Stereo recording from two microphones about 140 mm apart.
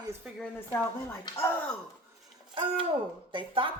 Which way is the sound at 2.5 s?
40° right (ahead or behind).